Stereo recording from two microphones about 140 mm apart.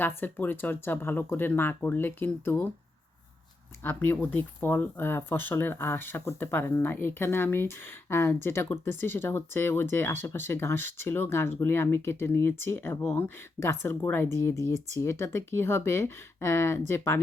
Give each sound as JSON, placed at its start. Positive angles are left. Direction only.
{"t": 0.2, "sound": "speech", "side_deg": 15}
{"t": 3.8, "sound": "speech", "side_deg": 15}